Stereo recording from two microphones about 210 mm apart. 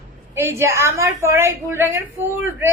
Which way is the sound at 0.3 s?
10° right (ahead or behind).